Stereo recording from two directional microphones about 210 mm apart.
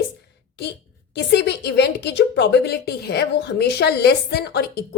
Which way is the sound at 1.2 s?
55° left (ahead or behind).